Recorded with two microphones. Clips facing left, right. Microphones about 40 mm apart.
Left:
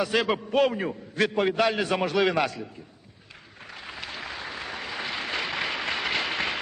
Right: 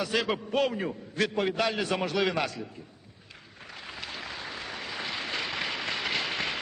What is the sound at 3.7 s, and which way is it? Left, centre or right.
Applause, centre.